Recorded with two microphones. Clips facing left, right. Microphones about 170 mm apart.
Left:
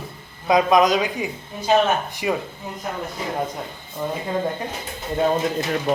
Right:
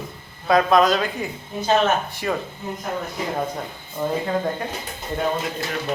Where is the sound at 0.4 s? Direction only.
15° left (ahead or behind).